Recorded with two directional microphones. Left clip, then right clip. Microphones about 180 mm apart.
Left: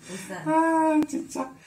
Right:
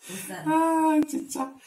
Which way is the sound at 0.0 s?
60° right (ahead or behind).